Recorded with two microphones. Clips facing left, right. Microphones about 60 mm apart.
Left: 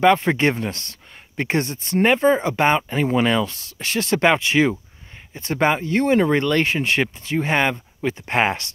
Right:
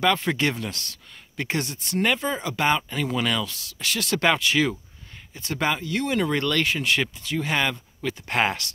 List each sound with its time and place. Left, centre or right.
0.0 s speech: left